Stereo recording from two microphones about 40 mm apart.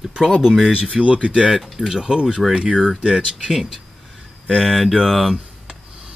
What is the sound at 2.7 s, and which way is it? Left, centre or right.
Speech, centre.